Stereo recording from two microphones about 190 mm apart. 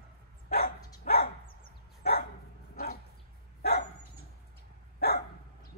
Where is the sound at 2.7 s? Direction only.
55° left (ahead or behind).